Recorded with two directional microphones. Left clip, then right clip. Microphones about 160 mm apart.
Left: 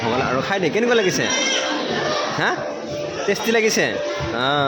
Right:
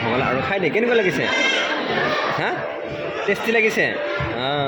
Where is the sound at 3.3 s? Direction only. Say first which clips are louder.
Even; 15° left (ahead or behind).